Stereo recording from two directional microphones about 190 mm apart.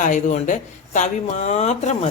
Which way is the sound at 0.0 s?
40° left (ahead or behind).